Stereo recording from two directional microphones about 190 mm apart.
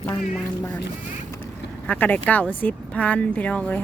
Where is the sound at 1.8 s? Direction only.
10° left (ahead or behind).